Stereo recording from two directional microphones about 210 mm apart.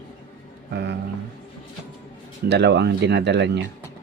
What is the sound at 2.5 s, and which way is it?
Speech, 55° right (ahead or behind).